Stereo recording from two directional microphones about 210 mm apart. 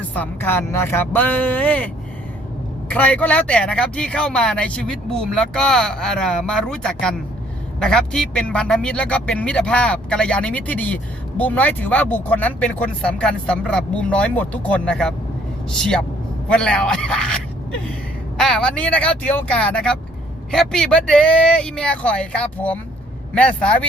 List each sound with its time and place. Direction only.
0.0 s speech: 10° left (ahead or behind)
2.9 s a man's voice: 5° left (ahead or behind)
18.3 s a man's voice: 5° left (ahead or behind)